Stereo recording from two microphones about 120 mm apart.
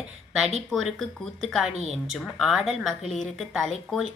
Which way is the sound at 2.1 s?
Centre (ahead or behind).